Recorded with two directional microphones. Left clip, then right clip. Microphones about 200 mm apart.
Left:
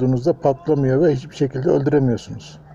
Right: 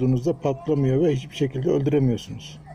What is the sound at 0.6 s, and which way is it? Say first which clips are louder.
Speech: left 5 dB; 35° left (ahead or behind).